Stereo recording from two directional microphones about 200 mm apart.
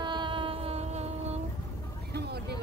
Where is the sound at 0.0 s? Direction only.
25° right (ahead or behind).